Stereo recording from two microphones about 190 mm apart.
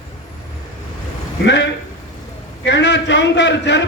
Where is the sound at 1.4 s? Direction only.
70° left (ahead or behind).